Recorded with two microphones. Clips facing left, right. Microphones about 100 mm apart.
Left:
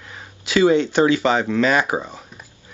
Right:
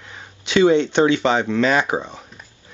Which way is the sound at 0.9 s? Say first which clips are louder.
Even; 25° right (ahead or behind).